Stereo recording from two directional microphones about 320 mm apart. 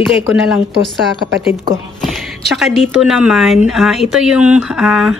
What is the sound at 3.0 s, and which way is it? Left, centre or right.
Speech, centre.